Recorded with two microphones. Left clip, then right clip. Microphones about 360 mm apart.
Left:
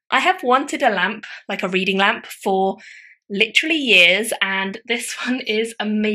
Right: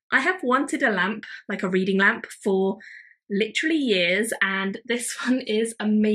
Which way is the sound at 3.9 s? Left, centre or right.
Centre.